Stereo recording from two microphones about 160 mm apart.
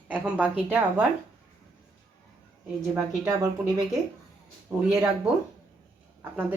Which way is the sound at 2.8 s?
20° right (ahead or behind).